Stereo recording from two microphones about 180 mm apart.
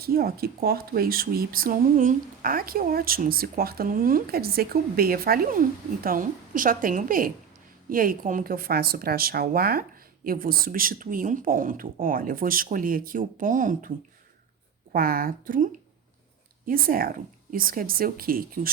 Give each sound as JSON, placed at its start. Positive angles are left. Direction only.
{"t": 0.0, "sound": "speech", "side_deg": -55}
{"t": 14.9, "sound": "speech", "side_deg": -55}